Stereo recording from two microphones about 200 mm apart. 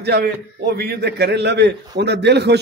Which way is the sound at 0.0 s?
55° right (ahead or behind).